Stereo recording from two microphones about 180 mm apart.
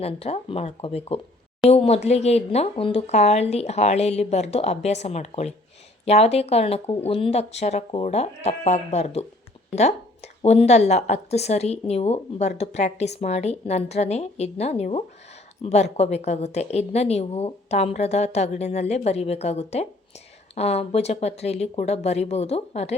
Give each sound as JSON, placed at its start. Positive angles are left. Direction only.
{"t": 0.0, "sound": "a woman's voice", "side_deg": 35}
{"t": 10.4, "sound": "a woman's voice", "side_deg": 35}